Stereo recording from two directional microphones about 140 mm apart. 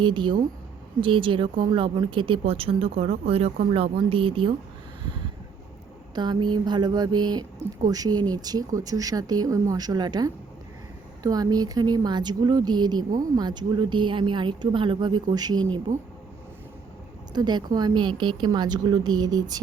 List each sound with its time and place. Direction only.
0.0 s speech: 35° right (ahead or behind)
6.1 s speech: 30° right (ahead or behind)
15.9 s speech: 65° right (ahead or behind)
17.3 s speech: 30° right (ahead or behind)